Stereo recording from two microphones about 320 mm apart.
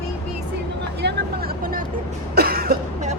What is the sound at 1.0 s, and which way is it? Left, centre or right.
Vehicle, right.